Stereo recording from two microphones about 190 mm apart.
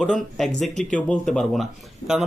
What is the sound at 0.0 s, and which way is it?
A man's voice, centre (ahead or behind).